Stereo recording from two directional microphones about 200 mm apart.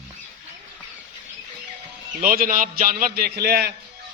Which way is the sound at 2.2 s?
45° right (ahead or behind).